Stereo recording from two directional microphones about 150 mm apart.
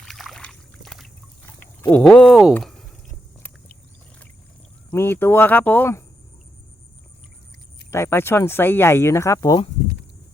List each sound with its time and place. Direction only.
0.0 s boat: centre (ahead or behind)
1.5 s speech: 10° left (ahead or behind)
4.9 s speech: 15° left (ahead or behind)
7.9 s speech: 15° left (ahead or behind)